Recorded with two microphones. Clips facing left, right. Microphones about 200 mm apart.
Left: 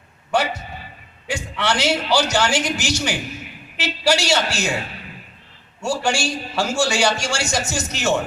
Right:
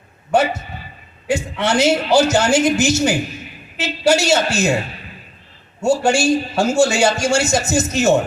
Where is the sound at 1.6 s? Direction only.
25° right (ahead or behind).